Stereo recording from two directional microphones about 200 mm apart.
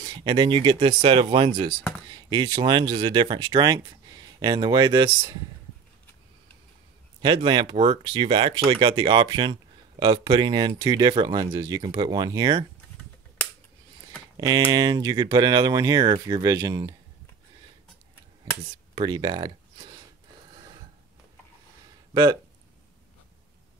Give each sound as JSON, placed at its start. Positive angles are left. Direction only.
{"t": 0.0, "sound": "speech", "side_deg": -25}
{"t": 7.2, "sound": "speech", "side_deg": -25}
{"t": 14.3, "sound": "speech", "side_deg": -20}
{"t": 18.9, "sound": "a sound", "side_deg": -20}
{"t": 22.1, "sound": "speech", "side_deg": -20}